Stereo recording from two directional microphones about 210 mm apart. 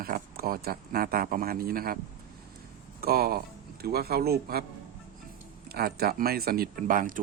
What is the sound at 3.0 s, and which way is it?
Speech, 45° right (ahead or behind).